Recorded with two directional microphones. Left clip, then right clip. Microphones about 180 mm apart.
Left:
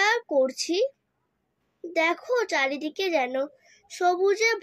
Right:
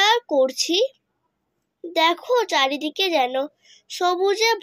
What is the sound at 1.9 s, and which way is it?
A child's voice, 20° right (ahead or behind).